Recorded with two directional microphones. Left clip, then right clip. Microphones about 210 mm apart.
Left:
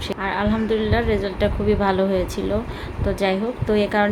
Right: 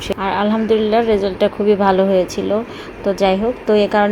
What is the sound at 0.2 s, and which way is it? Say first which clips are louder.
Speech: right 5 dB; 15° right (ahead or behind).